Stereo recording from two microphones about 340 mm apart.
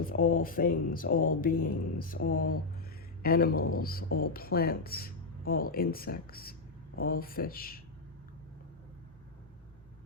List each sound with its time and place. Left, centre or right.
0.0 s speech: left